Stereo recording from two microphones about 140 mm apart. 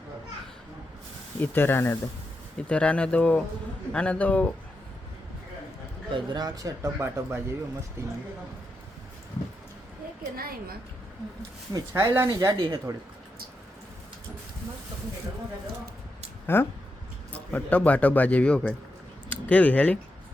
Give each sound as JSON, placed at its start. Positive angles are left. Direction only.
{"t": 1.4, "sound": "a man's voice", "side_deg": 15}
{"t": 6.1, "sound": "speech", "side_deg": -35}
{"t": 10.3, "sound": "a woman's voice", "side_deg": -90}
{"t": 11.7, "sound": "speech", "side_deg": -20}
{"t": 16.5, "sound": "a man's voice", "side_deg": 15}